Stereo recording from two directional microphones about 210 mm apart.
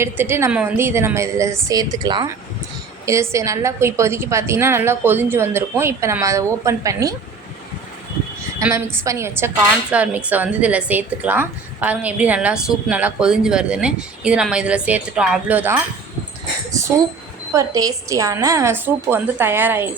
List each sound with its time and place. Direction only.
0.0 s a woman's voice: 10° right (ahead or behind)
8.5 s a woman's voice: 15° right (ahead or behind)
17.5 s a woman's voice: 15° right (ahead or behind)